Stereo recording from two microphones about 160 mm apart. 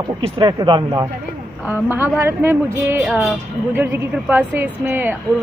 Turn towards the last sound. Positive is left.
turn(degrees=-10)  # may be behind; listen again after turning